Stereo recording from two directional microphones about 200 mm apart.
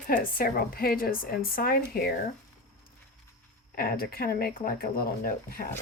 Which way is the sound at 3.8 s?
50° left (ahead or behind).